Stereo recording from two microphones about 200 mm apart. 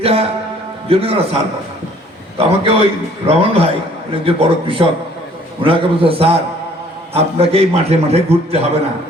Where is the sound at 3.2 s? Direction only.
30° right (ahead or behind).